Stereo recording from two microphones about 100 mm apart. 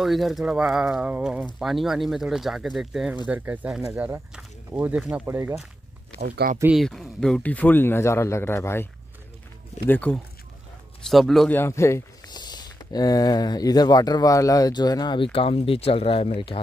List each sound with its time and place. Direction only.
0.0 s speech: centre (ahead or behind)
3.3 s speech: 15° right (ahead or behind)
6.7 s speech: centre (ahead or behind); by 8.8 s 25° left (ahead or behind)
9.8 s speech: 20° left (ahead or behind)
11.1 s speech: centre (ahead or behind)
11.4 s speech: 25° left (ahead or behind)
12.3 s speech: 45° left (ahead or behind)
15.3 s speech: 70° left (ahead or behind)